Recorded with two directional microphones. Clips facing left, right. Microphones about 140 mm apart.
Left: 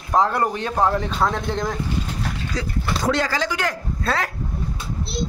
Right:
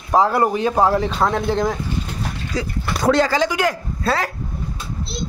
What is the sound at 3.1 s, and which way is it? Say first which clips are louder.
Speech: right 6 dB; 30° right (ahead or behind).